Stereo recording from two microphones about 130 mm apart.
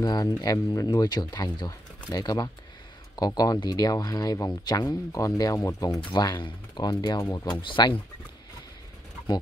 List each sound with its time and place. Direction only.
0.0 s speech: 30° left (ahead or behind)
5.9 s speech: 35° left (ahead or behind)